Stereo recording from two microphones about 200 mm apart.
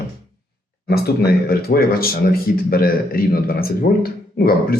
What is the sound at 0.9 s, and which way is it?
Speech, 50° left (ahead or behind).